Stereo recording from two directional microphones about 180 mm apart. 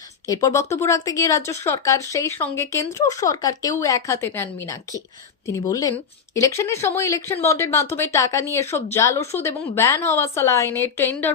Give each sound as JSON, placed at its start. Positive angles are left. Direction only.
{"t": 0.3, "sound": "speech", "side_deg": 15}